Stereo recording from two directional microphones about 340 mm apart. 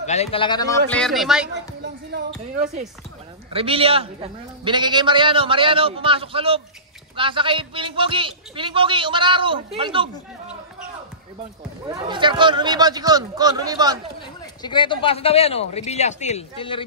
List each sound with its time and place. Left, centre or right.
0.0 s speech: centre
1.8 s a man's voice: right
11.9 s a man's voice: centre
14.6 s speech: centre